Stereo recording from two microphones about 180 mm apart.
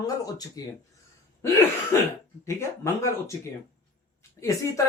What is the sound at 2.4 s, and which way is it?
Speech, 15° left (ahead or behind).